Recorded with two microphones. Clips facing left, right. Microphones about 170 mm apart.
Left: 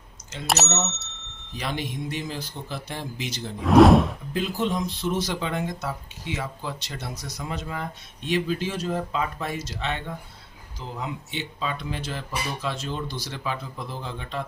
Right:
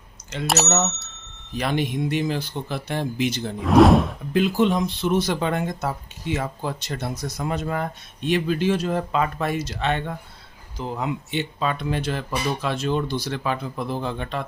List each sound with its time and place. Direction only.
0.5 s speech: centre (ahead or behind)
1.5 s speech: 60° right (ahead or behind)
3.6 s speech: centre (ahead or behind)
4.4 s speech: 65° right (ahead or behind)